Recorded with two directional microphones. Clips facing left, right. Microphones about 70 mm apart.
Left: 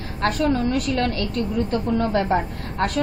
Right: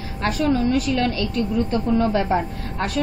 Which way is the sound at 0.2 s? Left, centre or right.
Left.